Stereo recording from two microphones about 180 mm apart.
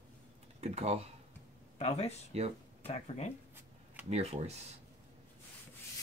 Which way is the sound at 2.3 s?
35° right (ahead or behind).